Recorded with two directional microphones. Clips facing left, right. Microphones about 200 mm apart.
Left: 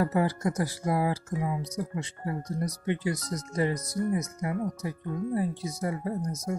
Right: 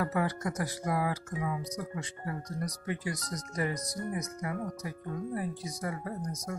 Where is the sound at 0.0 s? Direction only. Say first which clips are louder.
Left 5 dB; 30° left (ahead or behind).